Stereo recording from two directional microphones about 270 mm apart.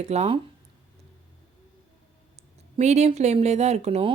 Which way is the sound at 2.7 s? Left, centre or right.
Right.